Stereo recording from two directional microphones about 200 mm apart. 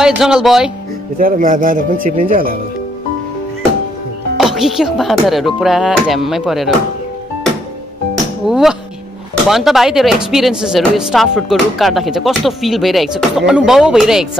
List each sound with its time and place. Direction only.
0.0 s speech: centre (ahead or behind)
1.1 s speech: 45° right (ahead or behind)
4.4 s speech: centre (ahead or behind)
8.1 s music: centre (ahead or behind)
9.5 s speech: centre (ahead or behind)